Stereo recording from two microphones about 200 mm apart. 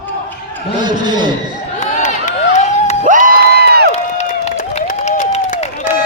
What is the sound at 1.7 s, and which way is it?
Crowd, 35° left (ahead or behind).